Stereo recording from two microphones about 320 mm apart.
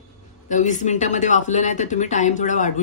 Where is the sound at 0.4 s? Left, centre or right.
Left.